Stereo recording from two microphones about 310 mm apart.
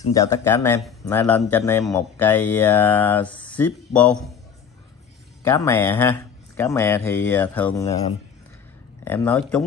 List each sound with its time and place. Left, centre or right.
0.1 s speech: centre
5.4 s speech: centre
9.0 s speech: centre